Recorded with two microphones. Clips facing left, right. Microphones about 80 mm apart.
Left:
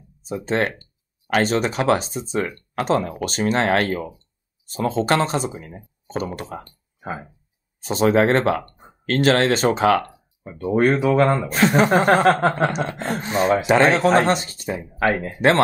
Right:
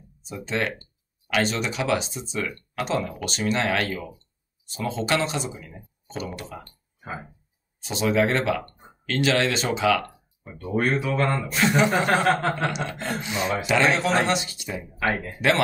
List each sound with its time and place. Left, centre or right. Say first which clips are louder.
0.2 s speech: left 6 dB; left
7.8 s speech: left 5 dB; left
10.4 s speech: left 5 dB; left
10.8 s a man's voice: left 7 dB; left